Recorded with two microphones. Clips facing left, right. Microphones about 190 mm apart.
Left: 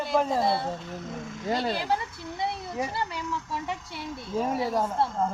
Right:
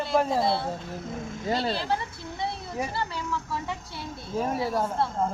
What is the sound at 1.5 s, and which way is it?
Speech, 15° left (ahead or behind).